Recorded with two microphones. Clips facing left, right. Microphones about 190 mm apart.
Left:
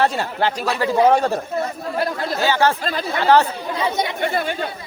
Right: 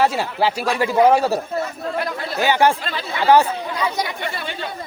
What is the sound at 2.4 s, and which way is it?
Speech, 15° right (ahead or behind).